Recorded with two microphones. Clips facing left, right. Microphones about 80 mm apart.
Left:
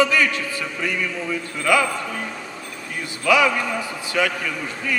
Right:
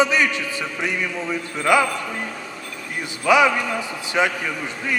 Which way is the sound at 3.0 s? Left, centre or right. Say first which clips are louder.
Right 2 dB; right.